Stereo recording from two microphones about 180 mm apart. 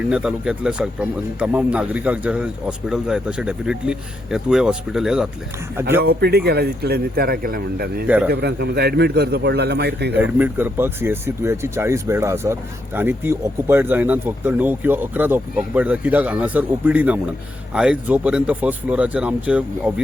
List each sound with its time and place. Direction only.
0.1 s speech: 5° right (ahead or behind)
6.0 s speech: 60° right (ahead or behind)
8.0 s speech: 10° right (ahead or behind)
8.3 s speech: 65° right (ahead or behind)
10.2 s speech: 10° right (ahead or behind)